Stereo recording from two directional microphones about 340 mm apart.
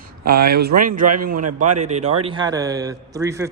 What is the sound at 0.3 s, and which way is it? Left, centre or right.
A man's voice, right.